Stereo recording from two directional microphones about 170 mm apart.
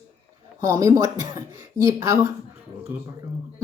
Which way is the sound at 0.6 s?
20° right (ahead or behind).